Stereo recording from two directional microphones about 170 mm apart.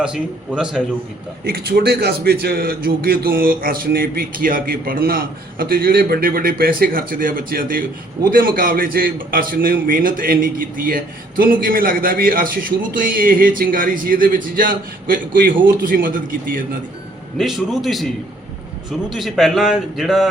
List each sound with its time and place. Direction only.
0.0 s a man's voice: 5° right (ahead or behind)
1.5 s a man's voice: 65° right (ahead or behind)
17.3 s a man's voice: centre (ahead or behind)